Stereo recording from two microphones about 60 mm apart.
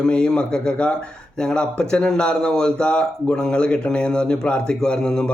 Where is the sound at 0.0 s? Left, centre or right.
Centre.